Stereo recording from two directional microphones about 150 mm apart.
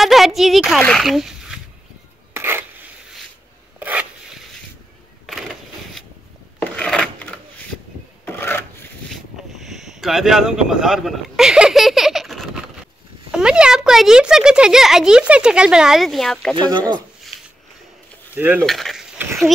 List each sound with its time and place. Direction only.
0.0 s speech: centre (ahead or behind)
2.3 s filing: 15° right (ahead or behind)
3.8 s rub: 10° right (ahead or behind)
5.2 s a sound: centre (ahead or behind)
8.3 s filing: 15° left (ahead or behind)
9.1 s speech: centre (ahead or behind)
16.5 s speech: 30° right (ahead or behind)
18.3 s coin: 10° right (ahead or behind)
18.7 s speech: centre (ahead or behind)